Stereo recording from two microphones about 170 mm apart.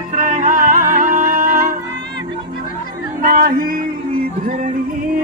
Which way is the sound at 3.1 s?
60° right (ahead or behind).